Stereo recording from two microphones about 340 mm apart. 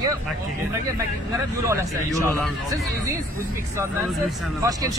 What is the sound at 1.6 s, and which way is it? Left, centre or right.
Speech, centre.